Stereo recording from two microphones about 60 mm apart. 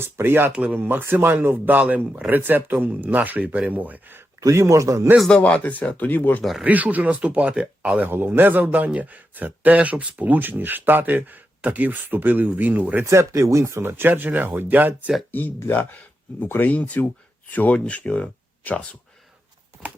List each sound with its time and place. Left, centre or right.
0.0 s a man's voice: right
0.5 s a man's voice: centre
0.8 s a man's voice: right
4.4 s speech: right
5.4 s speech: left
6.4 s speech: centre
6.7 s a man's voice: right
8.1 s a man's voice: right
13.1 s speech: right
13.8 s a man's voice: right
15.3 s speech: left